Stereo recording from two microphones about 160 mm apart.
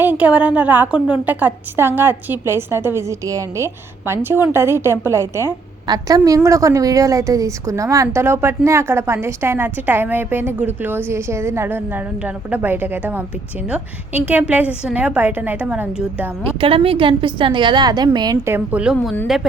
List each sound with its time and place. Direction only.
0.0 s a woman's voice: 10° right (ahead or behind)
16.6 s a woman's voice: 35° right (ahead or behind)
18.5 s a woman's voice: 10° right (ahead or behind)